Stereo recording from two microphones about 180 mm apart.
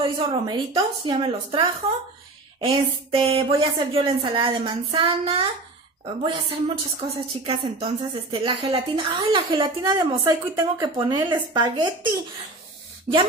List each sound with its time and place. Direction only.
0.0 s a woman's voice: 25° right (ahead or behind)
2.6 s a sound: 30° right (ahead or behind)
3.9 s a woman's voice: 30° right (ahead or behind)